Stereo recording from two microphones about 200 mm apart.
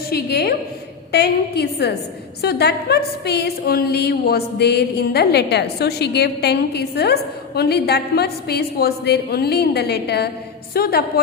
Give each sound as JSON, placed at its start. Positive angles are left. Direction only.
{"t": 0.1, "sound": "a woman's voice", "side_deg": 55}
{"t": 1.1, "sound": "a sound", "side_deg": 55}
{"t": 10.8, "sound": "a woman's voice", "side_deg": 50}